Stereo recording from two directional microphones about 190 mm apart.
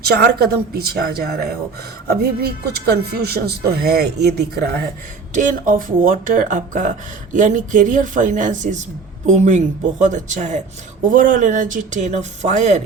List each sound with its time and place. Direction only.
0.0 s speech: 55° right (ahead or behind)
5.3 s speech: 40° right (ahead or behind)